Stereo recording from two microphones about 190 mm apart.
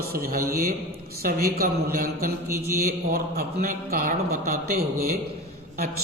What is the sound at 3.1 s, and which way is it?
Speech, 50° right (ahead or behind).